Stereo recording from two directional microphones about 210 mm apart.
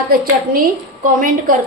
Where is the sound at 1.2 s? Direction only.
40° right (ahead or behind).